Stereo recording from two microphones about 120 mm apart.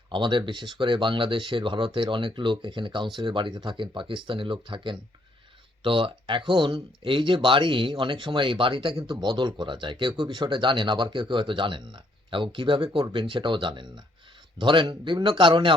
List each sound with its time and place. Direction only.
0.1 s speech: 40° right (ahead or behind)